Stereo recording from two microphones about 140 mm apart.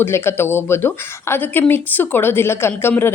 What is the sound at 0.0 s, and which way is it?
Speech, 15° left (ahead or behind).